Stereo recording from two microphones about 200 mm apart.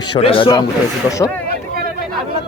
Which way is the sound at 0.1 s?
25° left (ahead or behind).